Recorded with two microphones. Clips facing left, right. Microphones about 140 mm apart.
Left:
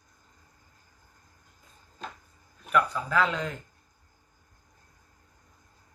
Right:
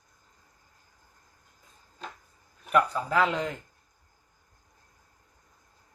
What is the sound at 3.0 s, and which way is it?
Speech, 25° right (ahead or behind).